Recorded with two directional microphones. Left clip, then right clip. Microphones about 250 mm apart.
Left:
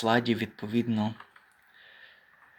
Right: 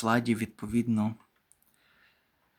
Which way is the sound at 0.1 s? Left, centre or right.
Centre.